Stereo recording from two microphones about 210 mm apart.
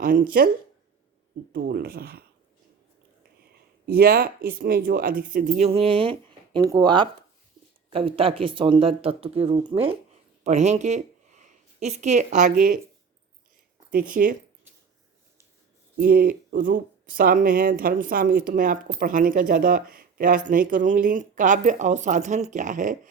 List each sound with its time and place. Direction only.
0.0 s speech: 40° right (ahead or behind)
1.5 s speech: 50° right (ahead or behind)
3.8 s speech: 45° right (ahead or behind)
13.9 s speech: 40° right (ahead or behind)
16.0 s speech: 45° right (ahead or behind)